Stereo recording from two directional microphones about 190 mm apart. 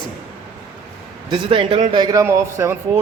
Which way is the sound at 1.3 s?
30° right (ahead or behind).